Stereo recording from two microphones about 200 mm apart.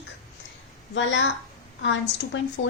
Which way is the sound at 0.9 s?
65° left (ahead or behind).